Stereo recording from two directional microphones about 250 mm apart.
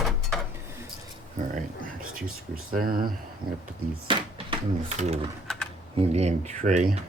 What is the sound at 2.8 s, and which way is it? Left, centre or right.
Speech, right.